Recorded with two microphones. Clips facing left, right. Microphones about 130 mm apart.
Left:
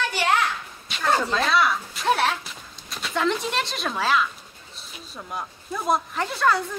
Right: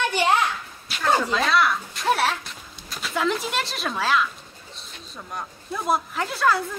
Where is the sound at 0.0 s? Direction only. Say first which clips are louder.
Right 2 dB; 20° right (ahead or behind).